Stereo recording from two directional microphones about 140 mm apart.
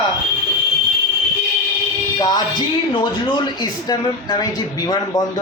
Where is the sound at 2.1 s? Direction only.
30° left (ahead or behind).